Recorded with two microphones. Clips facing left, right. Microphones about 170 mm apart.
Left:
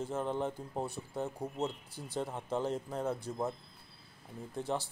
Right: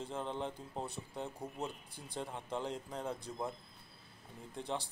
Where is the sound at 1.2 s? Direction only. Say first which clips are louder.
Left 6 dB; 15° left (ahead or behind).